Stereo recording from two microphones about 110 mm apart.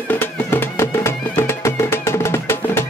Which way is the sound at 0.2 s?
20° left (ahead or behind).